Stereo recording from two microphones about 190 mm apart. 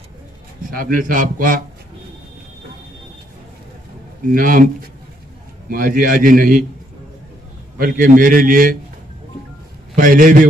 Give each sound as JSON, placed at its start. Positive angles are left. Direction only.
{"t": 0.7, "sound": "a man's voice", "side_deg": -45}
{"t": 4.3, "sound": "a man's voice", "side_deg": -45}
{"t": 5.7, "sound": "a man's voice", "side_deg": -45}
{"t": 7.8, "sound": "a man's voice", "side_deg": -45}
{"t": 9.9, "sound": "a man's voice", "side_deg": -45}